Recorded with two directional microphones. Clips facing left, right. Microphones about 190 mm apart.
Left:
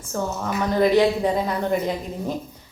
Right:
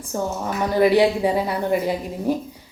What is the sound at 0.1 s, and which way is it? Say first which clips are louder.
Speech: right 1 dB; 15° right (ahead or behind).